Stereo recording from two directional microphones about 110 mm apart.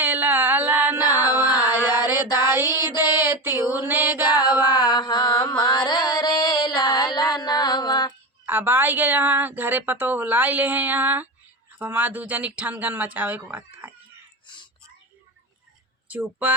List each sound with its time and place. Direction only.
0.0 s a sound: 15° right (ahead or behind)
2.0 s a sound: 40° left (ahead or behind)
2.5 s child singing: 20° right (ahead or behind)
4.4 s mantra: 40° left (ahead or behind)
6.9 s music: 40° left (ahead or behind)
8.4 s a woman's voice: 20° right (ahead or behind)
14.4 s whispering: 45° left (ahead or behind)
16.0 s speech: 15° right (ahead or behind)